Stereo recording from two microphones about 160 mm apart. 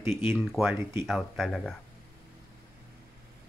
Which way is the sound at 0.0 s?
15° right (ahead or behind).